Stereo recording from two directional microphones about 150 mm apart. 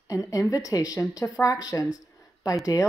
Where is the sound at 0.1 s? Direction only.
20° left (ahead or behind).